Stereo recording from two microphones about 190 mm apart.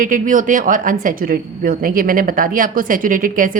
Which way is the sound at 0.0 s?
45° right (ahead or behind).